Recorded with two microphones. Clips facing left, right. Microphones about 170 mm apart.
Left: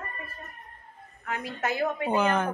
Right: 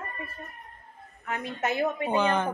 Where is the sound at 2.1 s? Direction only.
Centre (ahead or behind).